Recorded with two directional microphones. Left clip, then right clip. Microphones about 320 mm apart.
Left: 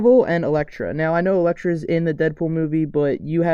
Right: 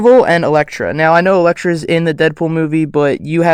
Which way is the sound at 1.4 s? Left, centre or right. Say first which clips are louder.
Right 8 dB; right.